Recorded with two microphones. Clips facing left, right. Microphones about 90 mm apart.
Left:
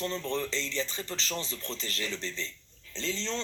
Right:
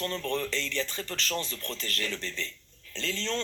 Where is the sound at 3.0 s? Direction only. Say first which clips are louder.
Right 1 dB; 20° left (ahead or behind).